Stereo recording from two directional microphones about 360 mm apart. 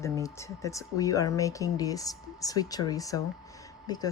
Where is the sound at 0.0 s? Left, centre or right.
Centre.